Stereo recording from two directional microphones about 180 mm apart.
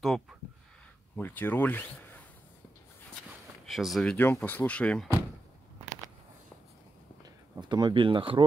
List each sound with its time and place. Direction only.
0.0 s speech: centre (ahead or behind)
3.3 s speech: centre (ahead or behind)
7.6 s speech: 25° right (ahead or behind)